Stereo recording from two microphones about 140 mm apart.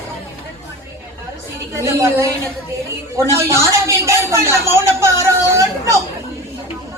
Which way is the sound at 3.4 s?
20° right (ahead or behind).